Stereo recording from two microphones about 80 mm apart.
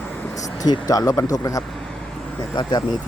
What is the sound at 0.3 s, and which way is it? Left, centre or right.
Speech, left.